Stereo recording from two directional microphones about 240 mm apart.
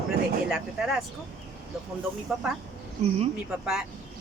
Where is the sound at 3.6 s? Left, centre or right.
Centre.